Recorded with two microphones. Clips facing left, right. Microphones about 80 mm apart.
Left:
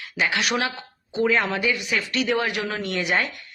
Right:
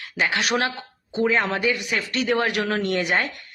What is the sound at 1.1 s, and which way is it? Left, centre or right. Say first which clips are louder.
Speech: even; right.